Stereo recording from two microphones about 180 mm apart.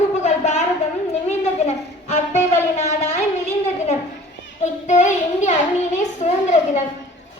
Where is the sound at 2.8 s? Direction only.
40° left (ahead or behind).